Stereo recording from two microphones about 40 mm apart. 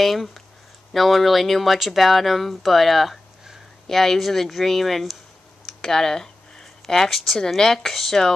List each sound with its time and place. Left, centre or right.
0.0 s speech: centre
5.7 s a sound: centre
6.6 s speech: centre